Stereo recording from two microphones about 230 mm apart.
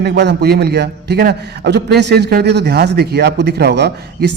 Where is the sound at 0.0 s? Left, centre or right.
Right.